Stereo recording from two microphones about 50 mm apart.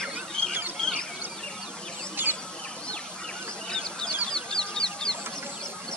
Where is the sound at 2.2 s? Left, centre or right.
Right.